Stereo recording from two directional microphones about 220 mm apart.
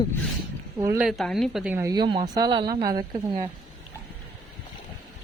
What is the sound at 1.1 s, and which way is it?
A woman's voice, centre (ahead or behind).